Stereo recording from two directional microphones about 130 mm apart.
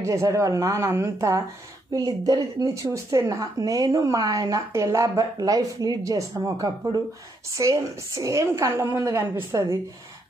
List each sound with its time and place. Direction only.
0.0 s a woman's voice: 25° right (ahead or behind)